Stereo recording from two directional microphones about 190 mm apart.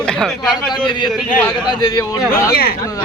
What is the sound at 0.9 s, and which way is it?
A man's voice, 25° left (ahead or behind).